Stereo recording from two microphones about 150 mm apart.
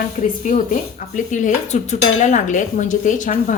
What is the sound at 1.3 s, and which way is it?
A woman's voice, 55° left (ahead or behind).